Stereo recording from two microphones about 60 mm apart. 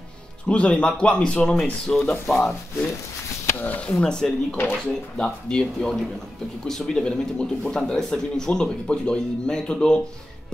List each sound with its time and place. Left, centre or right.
0.5 s speech: centre
3.5 s speech: left
4.0 s speech: centre